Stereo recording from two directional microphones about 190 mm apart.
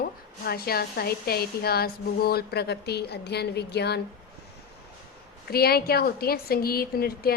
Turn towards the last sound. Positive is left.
turn(degrees=55)  # may be behind; listen again after turning